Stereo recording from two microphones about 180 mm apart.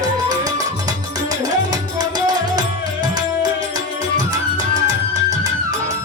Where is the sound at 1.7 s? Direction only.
20° right (ahead or behind).